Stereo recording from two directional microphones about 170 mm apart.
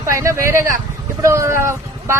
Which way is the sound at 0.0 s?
15° right (ahead or behind).